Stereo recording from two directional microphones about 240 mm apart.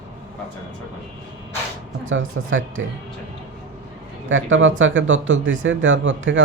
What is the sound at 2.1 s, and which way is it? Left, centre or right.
Speech, right.